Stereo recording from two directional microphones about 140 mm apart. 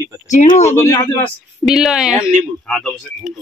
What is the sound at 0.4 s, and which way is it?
Speech, 55° left (ahead or behind).